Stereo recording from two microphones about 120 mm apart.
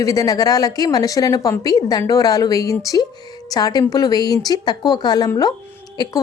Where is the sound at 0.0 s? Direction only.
30° left (ahead or behind).